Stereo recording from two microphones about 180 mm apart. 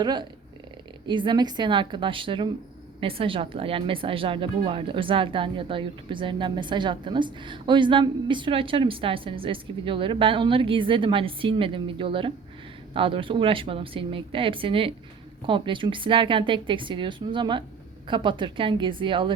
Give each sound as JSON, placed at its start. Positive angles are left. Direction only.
{"t": 0.0, "sound": "a woman's voice", "side_deg": -25}